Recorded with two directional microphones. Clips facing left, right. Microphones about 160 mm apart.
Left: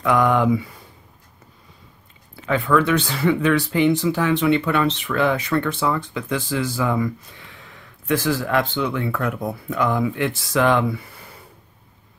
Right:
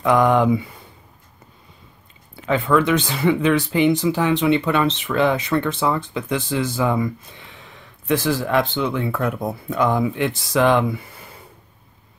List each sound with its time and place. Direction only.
0.0 s speech: 25° right (ahead or behind)
2.4 s speech: 25° right (ahead or behind)
8.1 s speech: 20° right (ahead or behind)